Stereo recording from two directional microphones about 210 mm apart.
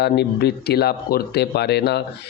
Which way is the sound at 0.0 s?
50° left (ahead or behind).